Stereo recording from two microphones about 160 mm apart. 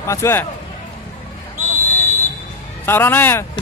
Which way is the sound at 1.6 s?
10° left (ahead or behind).